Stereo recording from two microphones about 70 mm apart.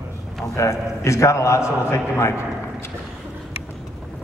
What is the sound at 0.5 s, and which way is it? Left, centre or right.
A man's voice, left.